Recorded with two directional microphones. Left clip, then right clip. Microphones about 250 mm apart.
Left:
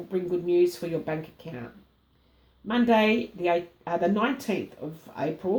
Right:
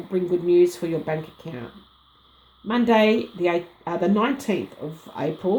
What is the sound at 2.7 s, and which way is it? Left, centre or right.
Speech, right.